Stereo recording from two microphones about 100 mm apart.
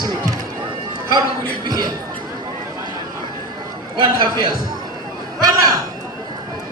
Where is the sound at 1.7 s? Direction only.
40° right (ahead or behind).